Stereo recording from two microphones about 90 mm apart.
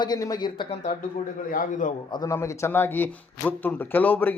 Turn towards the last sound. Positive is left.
turn(degrees=20)  # may be behind; listen again after turning